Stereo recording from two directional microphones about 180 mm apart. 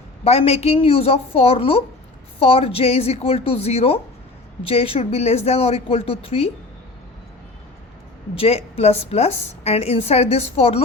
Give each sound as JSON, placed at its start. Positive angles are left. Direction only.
{"t": 0.3, "sound": "a woman's voice", "side_deg": 35}
{"t": 8.4, "sound": "a woman's voice", "side_deg": 35}